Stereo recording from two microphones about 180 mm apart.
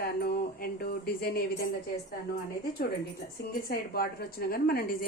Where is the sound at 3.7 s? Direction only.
55° left (ahead or behind).